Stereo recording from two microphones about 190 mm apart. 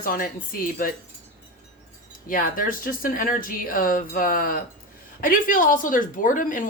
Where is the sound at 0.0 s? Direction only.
50° left (ahead or behind).